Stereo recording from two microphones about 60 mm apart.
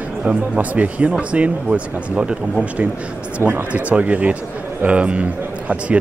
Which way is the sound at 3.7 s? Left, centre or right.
Right.